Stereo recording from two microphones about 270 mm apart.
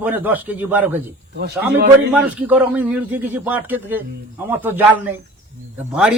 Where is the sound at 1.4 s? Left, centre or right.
Right.